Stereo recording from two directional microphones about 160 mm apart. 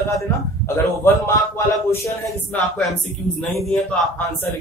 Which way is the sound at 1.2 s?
15° left (ahead or behind).